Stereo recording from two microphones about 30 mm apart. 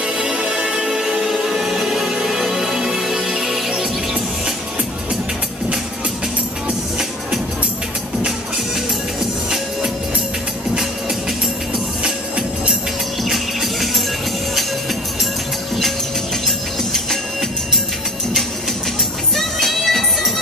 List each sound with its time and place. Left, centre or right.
0.0 s music: right; by 3.7 s centre
12.0 s music: right
16.4 s music: centre
19.3 s music: centre